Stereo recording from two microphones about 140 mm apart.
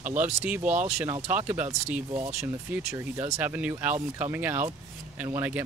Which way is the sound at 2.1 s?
45° right (ahead or behind).